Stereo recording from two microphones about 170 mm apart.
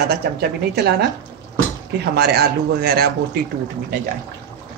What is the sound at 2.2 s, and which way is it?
Speech, 70° right (ahead or behind).